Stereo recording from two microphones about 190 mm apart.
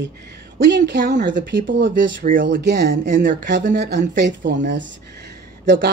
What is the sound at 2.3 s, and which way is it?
A woman's voice, 45° right (ahead or behind).